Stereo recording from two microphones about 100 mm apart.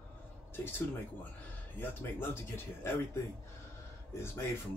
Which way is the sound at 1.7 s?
25° left (ahead or behind).